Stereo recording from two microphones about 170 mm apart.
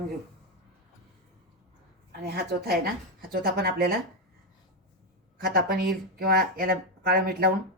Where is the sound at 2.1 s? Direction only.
70° right (ahead or behind).